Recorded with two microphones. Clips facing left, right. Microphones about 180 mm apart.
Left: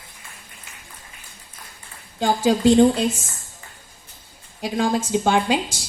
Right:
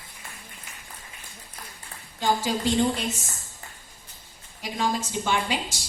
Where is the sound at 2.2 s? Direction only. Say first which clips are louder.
Left 8 dB; 50° left (ahead or behind).